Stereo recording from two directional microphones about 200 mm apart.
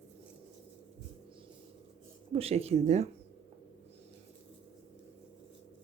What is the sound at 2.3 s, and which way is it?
Speech, 30° right (ahead or behind).